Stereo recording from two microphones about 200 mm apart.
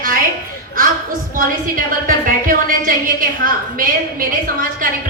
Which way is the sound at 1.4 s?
45° right (ahead or behind).